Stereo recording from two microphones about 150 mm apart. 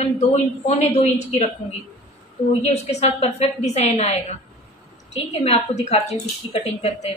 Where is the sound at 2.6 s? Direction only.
45° left (ahead or behind).